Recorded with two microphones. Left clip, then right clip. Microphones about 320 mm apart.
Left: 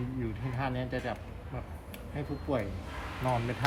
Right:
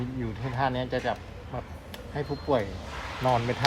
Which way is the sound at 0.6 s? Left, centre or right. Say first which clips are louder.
Right 7 dB; right.